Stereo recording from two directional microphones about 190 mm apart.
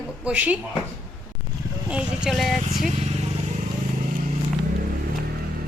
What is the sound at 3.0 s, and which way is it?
Vehicle, 35° right (ahead or behind).